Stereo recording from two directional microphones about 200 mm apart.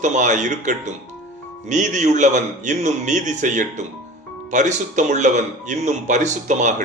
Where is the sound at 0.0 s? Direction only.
40° right (ahead or behind).